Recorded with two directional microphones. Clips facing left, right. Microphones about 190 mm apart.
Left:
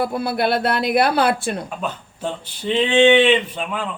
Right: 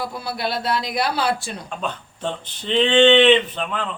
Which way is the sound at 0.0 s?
55° left (ahead or behind).